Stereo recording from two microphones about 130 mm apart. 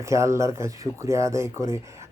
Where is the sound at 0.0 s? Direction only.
20° right (ahead or behind).